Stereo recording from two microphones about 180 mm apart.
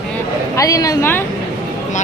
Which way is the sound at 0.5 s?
20° left (ahead or behind).